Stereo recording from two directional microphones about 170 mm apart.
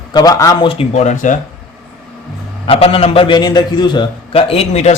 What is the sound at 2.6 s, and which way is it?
A man's voice, 30° left (ahead or behind).